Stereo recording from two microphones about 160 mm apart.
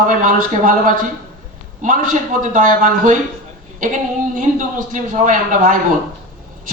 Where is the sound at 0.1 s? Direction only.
55° right (ahead or behind).